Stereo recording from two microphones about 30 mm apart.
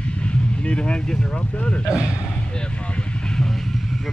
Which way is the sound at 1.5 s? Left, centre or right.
Left.